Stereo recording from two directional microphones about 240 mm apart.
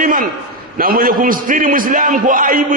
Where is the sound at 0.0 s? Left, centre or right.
Right.